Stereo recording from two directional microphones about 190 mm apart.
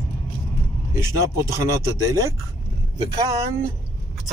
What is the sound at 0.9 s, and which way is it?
Speech, 15° right (ahead or behind).